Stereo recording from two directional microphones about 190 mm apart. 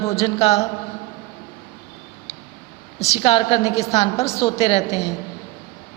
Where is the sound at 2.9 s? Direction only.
35° left (ahead or behind).